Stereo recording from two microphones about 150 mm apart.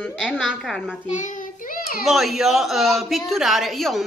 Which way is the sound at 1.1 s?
55° left (ahead or behind).